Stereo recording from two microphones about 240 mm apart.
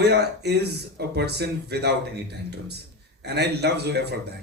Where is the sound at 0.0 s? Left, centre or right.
Right.